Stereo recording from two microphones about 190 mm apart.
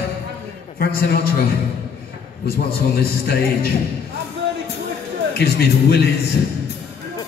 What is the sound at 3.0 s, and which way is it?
Music, 55° left (ahead or behind).